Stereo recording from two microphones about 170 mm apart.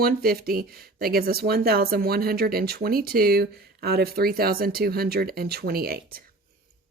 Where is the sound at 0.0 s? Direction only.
60° right (ahead or behind).